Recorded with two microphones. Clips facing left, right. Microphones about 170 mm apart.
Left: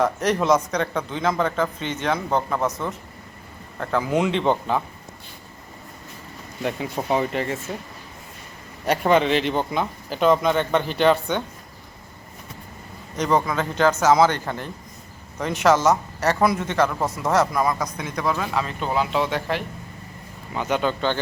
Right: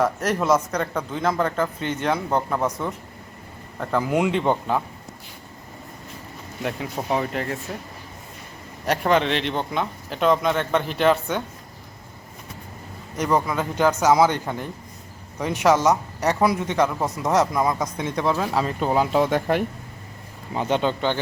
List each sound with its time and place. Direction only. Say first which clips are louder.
0.0 s speech: left 1 dB; 5° right (ahead or behind)
6.6 s speech: left 2 dB; centre (ahead or behind)
8.9 s speech: left 2 dB; centre (ahead or behind)
13.1 s speech: left 1 dB; 10° right (ahead or behind); by 19.6 s 50° right (ahead or behind)
20.5 s speech: right 1 dB; 30° right (ahead or behind)